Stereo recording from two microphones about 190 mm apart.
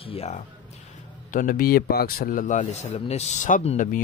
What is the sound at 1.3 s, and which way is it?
Speech, 45° left (ahead or behind).